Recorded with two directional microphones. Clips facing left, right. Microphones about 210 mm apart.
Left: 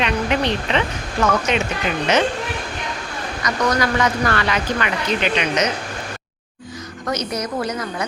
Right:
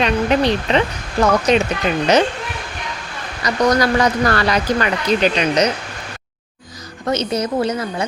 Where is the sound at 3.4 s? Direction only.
35° right (ahead or behind).